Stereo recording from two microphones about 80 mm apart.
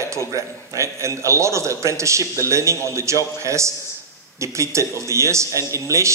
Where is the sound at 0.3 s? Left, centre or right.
Right.